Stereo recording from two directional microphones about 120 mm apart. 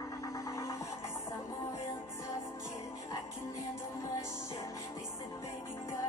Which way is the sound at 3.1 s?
25° left (ahead or behind).